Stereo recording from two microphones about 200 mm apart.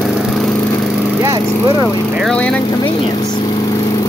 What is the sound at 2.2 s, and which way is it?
Speech, 5° left (ahead or behind).